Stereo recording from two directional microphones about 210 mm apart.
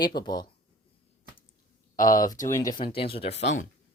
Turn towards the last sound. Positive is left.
turn(degrees=35)  # may be behind; listen again after turning